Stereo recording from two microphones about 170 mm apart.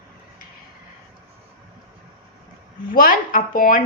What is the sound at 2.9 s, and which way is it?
Speech, 55° left (ahead or behind).